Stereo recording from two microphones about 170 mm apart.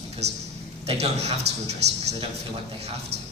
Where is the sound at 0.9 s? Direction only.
40° right (ahead or behind).